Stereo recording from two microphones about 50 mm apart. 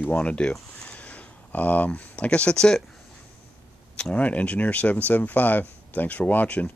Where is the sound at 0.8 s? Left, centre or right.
Left.